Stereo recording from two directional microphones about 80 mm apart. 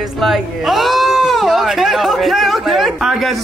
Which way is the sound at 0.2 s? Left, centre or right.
Centre.